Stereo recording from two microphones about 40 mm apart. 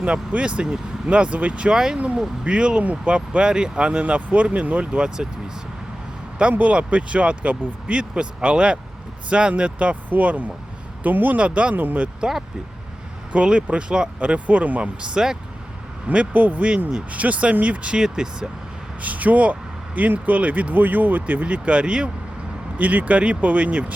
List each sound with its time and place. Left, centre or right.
0.3 s speech: right
1.7 s speech: centre
2.4 s speech: right
4.9 s speech: right
6.5 s speech: right
11.3 s speech: right
11.7 s speech: right
12.2 s speech: right
14.4 s speech: right
14.8 s speech: right
16.1 s speech: right
17.9 s speech: centre
19.0 s speech: right
22.8 s speech: right